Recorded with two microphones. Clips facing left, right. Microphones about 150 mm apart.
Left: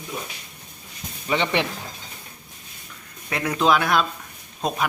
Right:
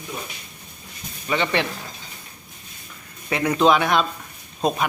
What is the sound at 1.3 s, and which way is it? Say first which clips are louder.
Speech: even; 20° left (ahead or behind).